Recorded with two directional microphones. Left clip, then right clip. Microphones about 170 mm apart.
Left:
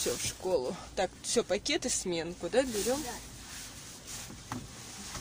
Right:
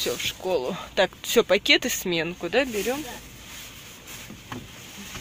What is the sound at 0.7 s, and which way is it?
Speech, 20° right (ahead or behind).